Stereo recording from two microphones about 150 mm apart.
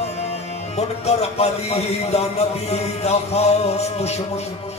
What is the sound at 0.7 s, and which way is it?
A man's voice, 45° left (ahead or behind).